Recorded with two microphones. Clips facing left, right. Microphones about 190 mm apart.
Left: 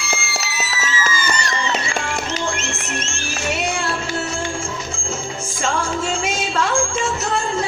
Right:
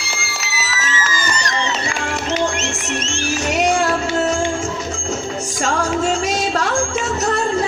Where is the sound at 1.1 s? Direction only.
40° right (ahead or behind).